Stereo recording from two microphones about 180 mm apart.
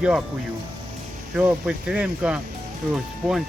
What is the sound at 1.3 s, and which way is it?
Speech, 5° right (ahead or behind).